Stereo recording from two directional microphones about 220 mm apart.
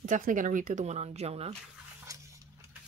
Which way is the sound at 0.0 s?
35° right (ahead or behind).